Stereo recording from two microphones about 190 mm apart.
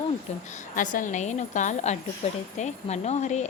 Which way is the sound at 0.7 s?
45° left (ahead or behind).